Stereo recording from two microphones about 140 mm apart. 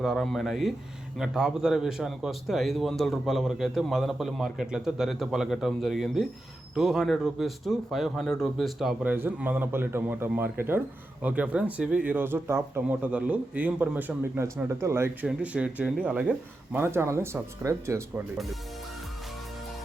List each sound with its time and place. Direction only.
0.0 s a man's voice: centre (ahead or behind)
9.1 s a man's voice: 15° right (ahead or behind)